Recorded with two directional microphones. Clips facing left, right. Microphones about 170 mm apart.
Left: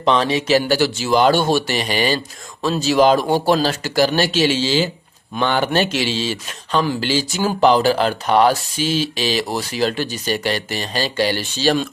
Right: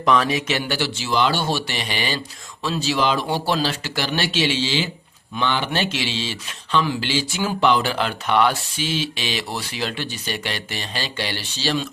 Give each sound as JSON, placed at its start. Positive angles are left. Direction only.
{"t": 0.0, "sound": "speech", "side_deg": 30}